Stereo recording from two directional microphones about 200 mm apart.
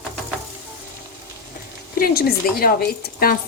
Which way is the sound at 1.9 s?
50° left (ahead or behind).